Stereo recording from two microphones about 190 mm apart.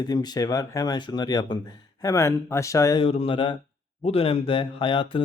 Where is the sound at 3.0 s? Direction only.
30° left (ahead or behind).